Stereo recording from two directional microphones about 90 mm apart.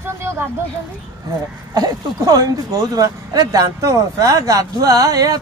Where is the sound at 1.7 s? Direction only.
45° right (ahead or behind).